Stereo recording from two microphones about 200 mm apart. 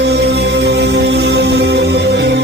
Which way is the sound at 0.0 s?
60° right (ahead or behind).